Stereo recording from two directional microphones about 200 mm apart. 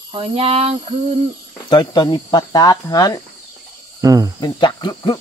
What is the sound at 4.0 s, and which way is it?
Speech, 15° right (ahead or behind).